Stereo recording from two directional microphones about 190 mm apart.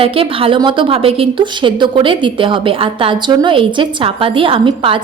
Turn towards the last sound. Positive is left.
turn(degrees=-25)  # may be behind; listen again after turning